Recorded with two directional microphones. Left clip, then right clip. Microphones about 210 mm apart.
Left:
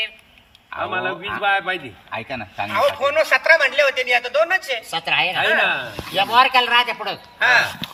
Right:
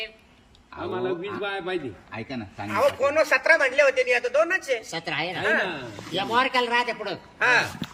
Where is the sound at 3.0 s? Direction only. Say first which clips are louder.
Left 4 dB; 15° right (ahead or behind).